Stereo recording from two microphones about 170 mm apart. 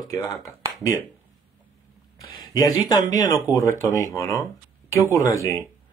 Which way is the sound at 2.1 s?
20° left (ahead or behind).